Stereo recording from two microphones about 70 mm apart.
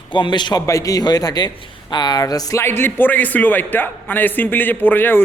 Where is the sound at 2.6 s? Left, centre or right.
Left.